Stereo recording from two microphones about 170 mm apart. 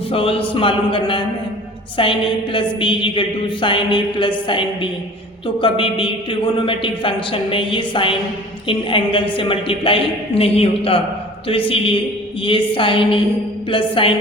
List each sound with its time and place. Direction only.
0.1 s a woman's voice: 30° left (ahead or behind)